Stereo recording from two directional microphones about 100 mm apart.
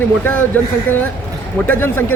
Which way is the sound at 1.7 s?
20° left (ahead or behind).